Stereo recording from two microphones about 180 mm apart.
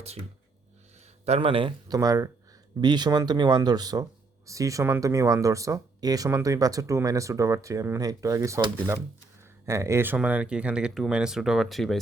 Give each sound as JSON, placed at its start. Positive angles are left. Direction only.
{"t": 1.2, "sound": "speech", "side_deg": -35}